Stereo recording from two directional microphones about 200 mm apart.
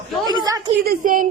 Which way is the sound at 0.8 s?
40° right (ahead or behind).